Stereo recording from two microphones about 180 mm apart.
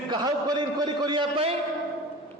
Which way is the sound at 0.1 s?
25° right (ahead or behind).